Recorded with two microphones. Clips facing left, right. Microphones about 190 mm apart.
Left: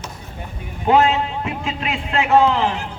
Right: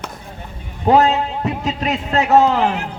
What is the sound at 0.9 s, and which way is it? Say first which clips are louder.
A man's voice: right 2 dB; 35° right (ahead or behind).